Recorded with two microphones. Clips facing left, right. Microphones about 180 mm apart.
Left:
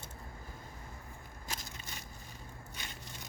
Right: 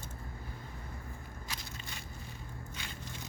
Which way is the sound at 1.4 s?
45° left (ahead or behind).